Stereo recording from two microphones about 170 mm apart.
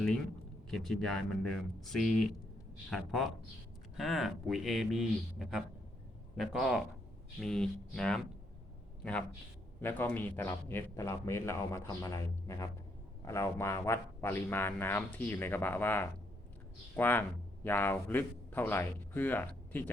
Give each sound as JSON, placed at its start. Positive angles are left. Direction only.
{"t": 0.7, "sound": "speech", "side_deg": 0}
{"t": 9.8, "sound": "a man's voice", "side_deg": 10}